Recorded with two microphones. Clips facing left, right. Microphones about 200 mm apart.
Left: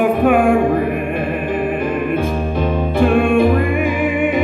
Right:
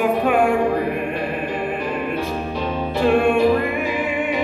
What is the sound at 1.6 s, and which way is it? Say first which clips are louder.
Music: left 5 dB; 50° left (ahead or behind).